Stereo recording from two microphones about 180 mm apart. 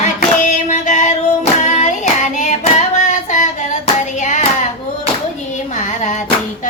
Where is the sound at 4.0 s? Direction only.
45° left (ahead or behind).